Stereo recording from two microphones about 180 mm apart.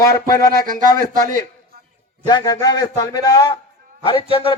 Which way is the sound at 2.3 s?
20° left (ahead or behind).